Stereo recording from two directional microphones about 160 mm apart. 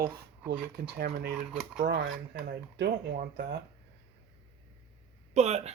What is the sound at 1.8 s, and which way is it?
Speech, 90° right.